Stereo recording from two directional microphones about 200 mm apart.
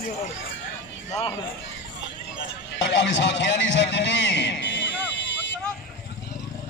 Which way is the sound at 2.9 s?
60° left (ahead or behind).